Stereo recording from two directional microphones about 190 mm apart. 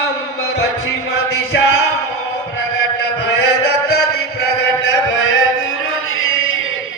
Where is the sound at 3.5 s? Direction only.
60° left (ahead or behind); by 6.7 s 90° left.